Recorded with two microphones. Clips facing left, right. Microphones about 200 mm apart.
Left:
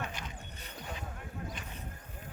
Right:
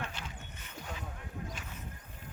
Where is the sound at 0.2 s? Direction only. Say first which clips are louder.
Left 1 dB; 15° left (ahead or behind).